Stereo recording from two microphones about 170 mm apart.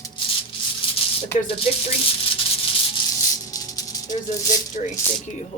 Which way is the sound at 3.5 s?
20° left (ahead or behind).